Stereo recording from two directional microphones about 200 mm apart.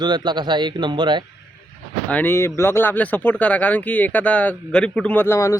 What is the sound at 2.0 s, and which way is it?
Speech, 10° left (ahead or behind).